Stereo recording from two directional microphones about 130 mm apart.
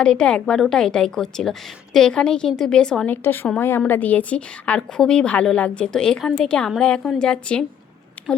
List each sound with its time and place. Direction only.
0.0 s a woman's voice: 5° left (ahead or behind)
3.1 s a woman's voice: 15° left (ahead or behind)